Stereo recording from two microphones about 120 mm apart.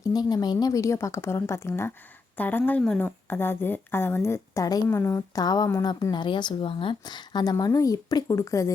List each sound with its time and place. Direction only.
0.1 s a woman's voice: 35° left (ahead or behind)